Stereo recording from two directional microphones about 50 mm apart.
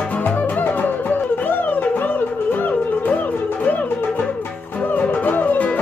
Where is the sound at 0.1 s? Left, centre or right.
Left.